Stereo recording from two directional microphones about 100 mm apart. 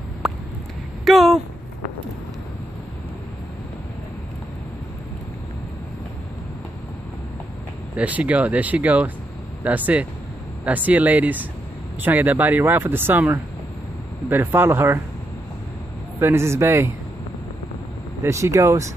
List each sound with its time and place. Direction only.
0.2 s a sound: 5° right (ahead or behind)
7.9 s speech: 15° right (ahead or behind)
16.2 s speech: 25° right (ahead or behind)
18.2 s speech: 30° right (ahead or behind)